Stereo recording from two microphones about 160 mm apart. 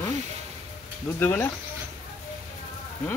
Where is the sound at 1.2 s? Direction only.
10° left (ahead or behind).